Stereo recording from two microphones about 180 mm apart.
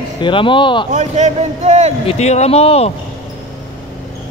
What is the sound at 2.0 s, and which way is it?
Speech, 35° left (ahead or behind).